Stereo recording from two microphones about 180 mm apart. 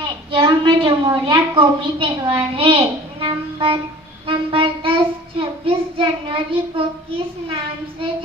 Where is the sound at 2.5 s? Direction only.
30° right (ahead or behind).